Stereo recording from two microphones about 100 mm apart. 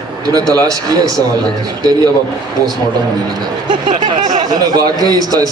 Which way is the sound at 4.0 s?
55° right (ahead or behind).